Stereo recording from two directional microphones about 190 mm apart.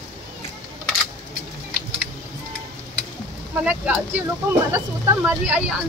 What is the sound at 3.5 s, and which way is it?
Speech, 5° right (ahead or behind).